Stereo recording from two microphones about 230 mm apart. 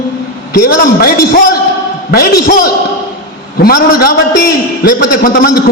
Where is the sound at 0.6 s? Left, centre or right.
Left.